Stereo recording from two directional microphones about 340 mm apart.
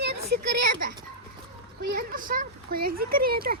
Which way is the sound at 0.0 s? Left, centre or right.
Right.